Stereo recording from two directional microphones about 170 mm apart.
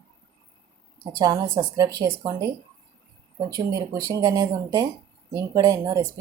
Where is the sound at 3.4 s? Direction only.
20° right (ahead or behind).